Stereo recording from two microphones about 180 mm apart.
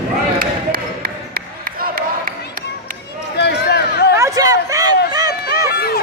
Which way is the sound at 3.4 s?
65° left (ahead or behind).